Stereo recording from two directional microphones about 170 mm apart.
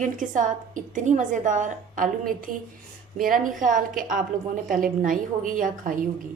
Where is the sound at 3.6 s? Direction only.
50° right (ahead or behind).